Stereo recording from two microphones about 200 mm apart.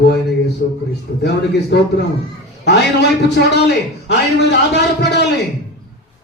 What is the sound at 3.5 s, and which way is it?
A man's voice, 55° left (ahead or behind).